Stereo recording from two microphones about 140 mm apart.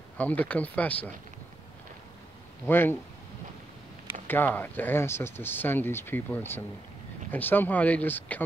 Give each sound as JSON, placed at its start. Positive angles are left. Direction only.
{"t": 0.2, "sound": "speech", "side_deg": 10}
{"t": 2.6, "sound": "speech", "side_deg": 15}
{"t": 4.3, "sound": "speech", "side_deg": 15}